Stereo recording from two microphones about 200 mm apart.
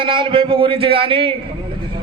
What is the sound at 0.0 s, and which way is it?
A man's voice, 25° right (ahead or behind).